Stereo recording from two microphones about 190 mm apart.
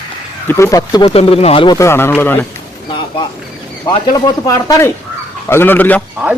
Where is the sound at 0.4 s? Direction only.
15° left (ahead or behind).